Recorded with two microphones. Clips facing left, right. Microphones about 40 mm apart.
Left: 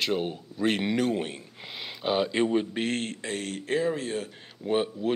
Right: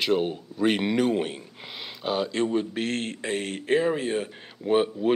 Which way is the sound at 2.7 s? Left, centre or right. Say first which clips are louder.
Right 1 dB; centre.